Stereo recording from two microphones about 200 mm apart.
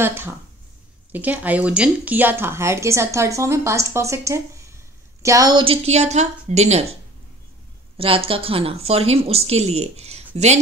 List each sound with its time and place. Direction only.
0.0 s speech: 10° right (ahead or behind); by 7.0 s 30° right (ahead or behind)
8.0 s speech: 25° right (ahead or behind)